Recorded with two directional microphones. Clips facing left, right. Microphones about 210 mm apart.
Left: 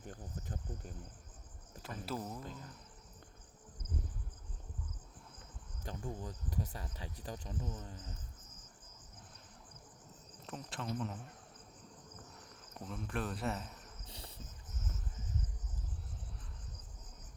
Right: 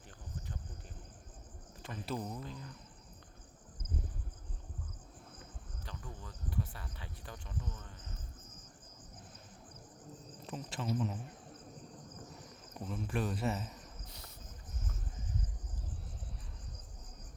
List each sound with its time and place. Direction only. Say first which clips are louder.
0.0 s cricket: left 3 dB; 45° left (ahead or behind)
2.0 s speech: right 2 dB; 5° left (ahead or behind)
2.4 s speech: right 2 dB; 45° left (ahead or behind)
5.8 s speech: left 7 dB; 45° left (ahead or behind)
10.4 s speech: right 3 dB; centre (ahead or behind)
12.8 s speech: right 3 dB; centre (ahead or behind)